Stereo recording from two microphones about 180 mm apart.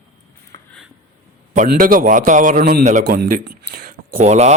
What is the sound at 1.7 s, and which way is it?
Speech, 50° right (ahead or behind).